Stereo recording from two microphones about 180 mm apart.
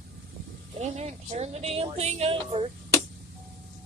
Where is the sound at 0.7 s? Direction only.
35° right (ahead or behind).